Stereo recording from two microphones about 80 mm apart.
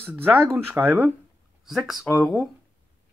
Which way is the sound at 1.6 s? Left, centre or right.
Centre.